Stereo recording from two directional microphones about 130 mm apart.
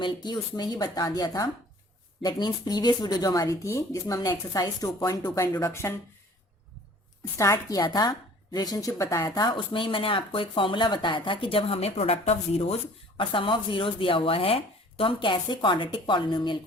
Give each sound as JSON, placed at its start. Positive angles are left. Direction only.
{"t": 0.0, "sound": "speech", "side_deg": 35}
{"t": 7.3, "sound": "speech", "side_deg": 25}